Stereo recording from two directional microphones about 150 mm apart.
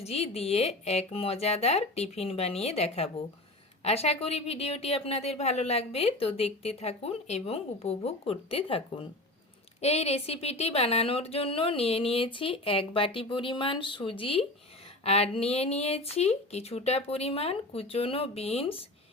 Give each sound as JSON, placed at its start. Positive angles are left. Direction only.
{"t": 0.0, "sound": "a woman's voice", "side_deg": 45}